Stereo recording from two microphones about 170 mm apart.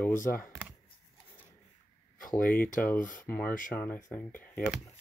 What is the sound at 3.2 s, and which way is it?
Speech, 10° left (ahead or behind).